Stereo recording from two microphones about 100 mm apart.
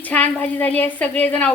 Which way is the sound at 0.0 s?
15° left (ahead or behind).